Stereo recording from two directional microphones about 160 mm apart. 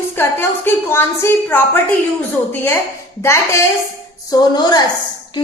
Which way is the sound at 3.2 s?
15° left (ahead or behind).